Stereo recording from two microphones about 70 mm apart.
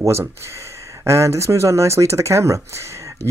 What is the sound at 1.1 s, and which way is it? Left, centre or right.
Speech, right.